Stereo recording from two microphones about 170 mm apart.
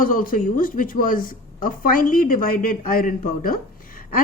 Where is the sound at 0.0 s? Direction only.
55° left (ahead or behind).